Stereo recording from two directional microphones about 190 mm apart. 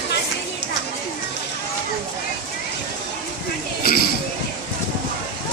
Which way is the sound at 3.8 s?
50° left (ahead or behind).